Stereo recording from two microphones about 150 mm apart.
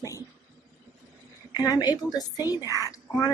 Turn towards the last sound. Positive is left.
turn(degrees=25)  # may be behind; listen again after turning